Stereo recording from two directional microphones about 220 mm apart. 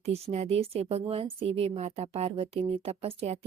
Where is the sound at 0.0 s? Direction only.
30° right (ahead or behind).